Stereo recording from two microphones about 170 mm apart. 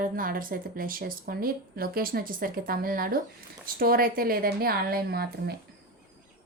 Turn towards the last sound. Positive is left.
turn(degrees=-65)  # may be behind; listen again after turning